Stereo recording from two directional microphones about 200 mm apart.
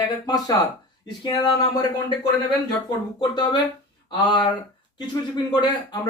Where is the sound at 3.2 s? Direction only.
20° left (ahead or behind).